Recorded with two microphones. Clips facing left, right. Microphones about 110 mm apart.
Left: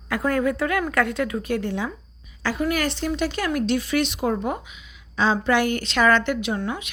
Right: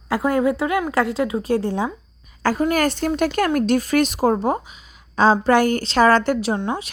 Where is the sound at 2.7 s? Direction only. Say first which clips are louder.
Right 5 dB; 45° right (ahead or behind).